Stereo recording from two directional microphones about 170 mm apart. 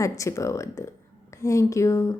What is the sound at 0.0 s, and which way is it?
A woman's voice, 20° left (ahead or behind).